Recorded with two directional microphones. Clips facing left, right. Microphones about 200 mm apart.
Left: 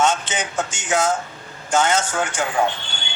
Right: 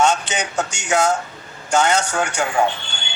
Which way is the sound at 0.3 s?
70° right (ahead or behind).